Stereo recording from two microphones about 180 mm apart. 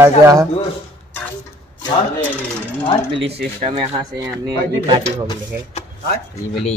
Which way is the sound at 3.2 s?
65° right (ahead or behind).